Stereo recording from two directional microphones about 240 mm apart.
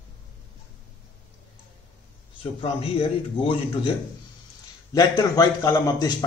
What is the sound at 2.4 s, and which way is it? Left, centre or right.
A man's voice, left.